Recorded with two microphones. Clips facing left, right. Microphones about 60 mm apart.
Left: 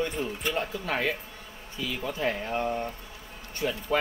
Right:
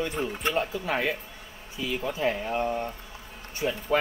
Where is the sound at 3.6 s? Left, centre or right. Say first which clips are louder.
Right 1 dB; centre.